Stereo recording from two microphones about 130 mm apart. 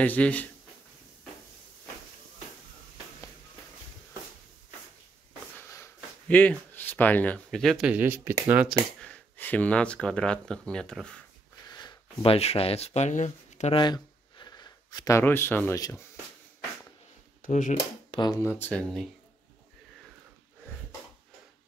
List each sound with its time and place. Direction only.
0.0 s speech: 10° left (ahead or behind)
5.6 s a sound: 20° left (ahead or behind); by 7.9 s centre (ahead or behind)
7.9 s speech: 15° right (ahead or behind)
9.0 s speech: 10° left (ahead or behind)
11.7 s speech: 40° left (ahead or behind); by 13.7 s 65° left (ahead or behind)
13.7 s a sound: 35° left (ahead or behind); by 15.8 s 15° left (ahead or behind)
17.4 s speech: 90° left
18.1 s speech: 35° left (ahead or behind)
18.4 s speech: 15° left (ahead or behind)